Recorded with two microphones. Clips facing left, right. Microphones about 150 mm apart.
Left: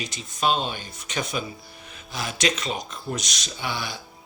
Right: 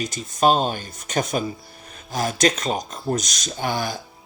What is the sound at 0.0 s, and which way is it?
Speech, 45° right (ahead or behind).